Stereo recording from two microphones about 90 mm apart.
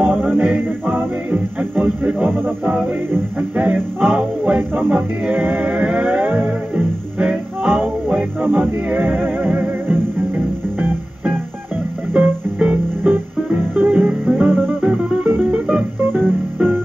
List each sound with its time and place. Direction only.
0.0 s music: 20° right (ahead or behind)
16.2 s music: 20° right (ahead or behind)